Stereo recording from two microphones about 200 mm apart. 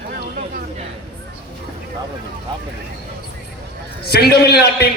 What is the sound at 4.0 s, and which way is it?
Speech, 50° left (ahead or behind).